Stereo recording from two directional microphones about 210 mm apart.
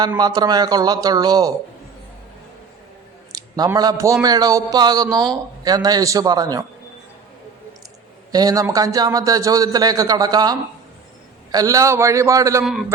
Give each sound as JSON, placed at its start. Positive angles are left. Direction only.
{"t": 0.0, "sound": "speech", "side_deg": -20}
{"t": 3.3, "sound": "a man's voice", "side_deg": -20}
{"t": 8.3, "sound": "a man's voice", "side_deg": -20}